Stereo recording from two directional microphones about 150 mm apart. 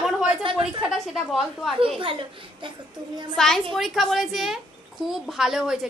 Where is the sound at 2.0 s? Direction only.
35° right (ahead or behind).